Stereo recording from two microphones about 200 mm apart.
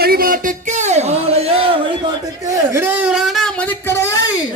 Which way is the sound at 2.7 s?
10° right (ahead or behind).